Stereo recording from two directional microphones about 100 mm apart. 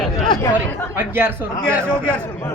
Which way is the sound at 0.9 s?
20° right (ahead or behind).